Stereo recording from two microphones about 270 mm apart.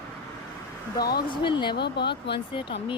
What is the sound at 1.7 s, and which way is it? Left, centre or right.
Speech, left.